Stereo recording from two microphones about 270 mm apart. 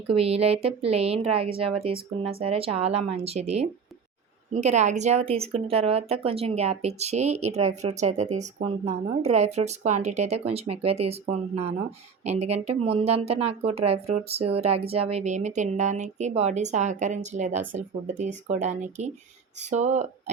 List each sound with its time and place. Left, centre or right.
0.1 s speech: right